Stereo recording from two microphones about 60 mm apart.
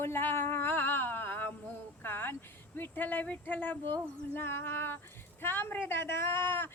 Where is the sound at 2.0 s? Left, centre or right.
Left.